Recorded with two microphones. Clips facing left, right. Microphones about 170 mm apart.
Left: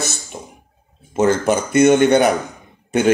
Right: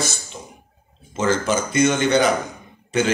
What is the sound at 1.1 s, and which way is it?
Speech, 55° left (ahead or behind).